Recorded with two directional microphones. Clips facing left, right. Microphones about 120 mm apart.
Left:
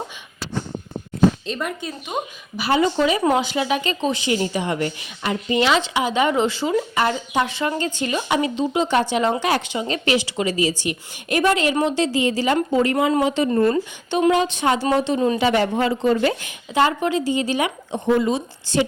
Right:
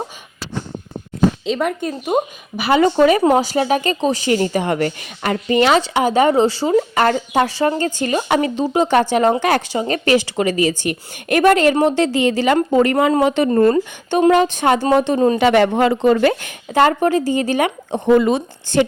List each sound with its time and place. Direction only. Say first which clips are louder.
1.5 s speech: right 7 dB; 65° right (ahead or behind)
1.9 s speech: right 9 dB; 40° right (ahead or behind)
2.6 s speech: right 4 dB; 65° right (ahead or behind)
2.9 s speech: right 7 dB; 50° right (ahead or behind)
3.3 s speech: right 5 dB; 40° right (ahead or behind)
6.9 s speech: right 5 dB; 55° right (ahead or behind)
7.4 s speech: right 6 dB; 35° right (ahead or behind); by 13.5 s 55° right (ahead or behind)
13.5 s speech: right 5 dB; 40° right (ahead or behind)
15.4 s speech: right 5 dB; 70° right (ahead or behind)